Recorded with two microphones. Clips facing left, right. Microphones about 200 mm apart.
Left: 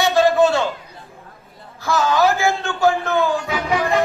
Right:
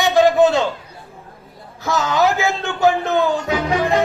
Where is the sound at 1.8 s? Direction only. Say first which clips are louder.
Even; 20° right (ahead or behind).